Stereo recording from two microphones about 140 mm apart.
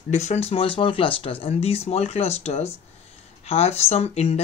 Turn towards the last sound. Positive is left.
turn(degrees=45)  # may be behind; listen again after turning